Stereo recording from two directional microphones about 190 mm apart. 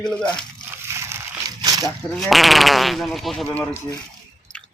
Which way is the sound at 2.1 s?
Centre (ahead or behind).